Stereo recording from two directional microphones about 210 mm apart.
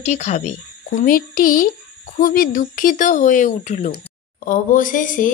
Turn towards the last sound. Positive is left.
turn(degrees=40)  # may be behind; listen again after turning